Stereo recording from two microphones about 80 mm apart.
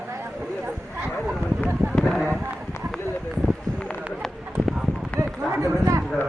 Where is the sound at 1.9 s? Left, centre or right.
Centre.